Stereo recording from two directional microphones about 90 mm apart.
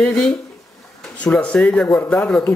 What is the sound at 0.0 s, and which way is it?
Speech, 10° left (ahead or behind).